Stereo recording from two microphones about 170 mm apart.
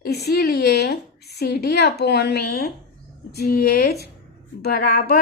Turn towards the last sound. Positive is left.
turn(degrees=60)  # may be behind; listen again after turning